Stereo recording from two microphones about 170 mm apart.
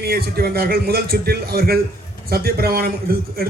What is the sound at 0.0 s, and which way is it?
A man's voice, 65° right (ahead or behind).